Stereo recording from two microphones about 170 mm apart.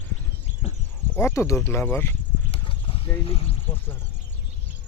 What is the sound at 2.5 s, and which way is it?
Clip-clop, 30° left (ahead or behind).